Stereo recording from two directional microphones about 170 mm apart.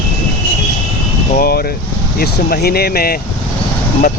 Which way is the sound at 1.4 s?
65° left (ahead or behind).